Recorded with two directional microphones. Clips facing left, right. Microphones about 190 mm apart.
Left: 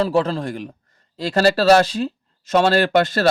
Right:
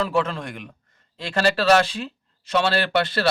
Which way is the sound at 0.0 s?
35° left (ahead or behind).